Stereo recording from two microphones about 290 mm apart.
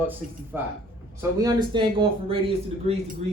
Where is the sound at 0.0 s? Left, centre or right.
Centre.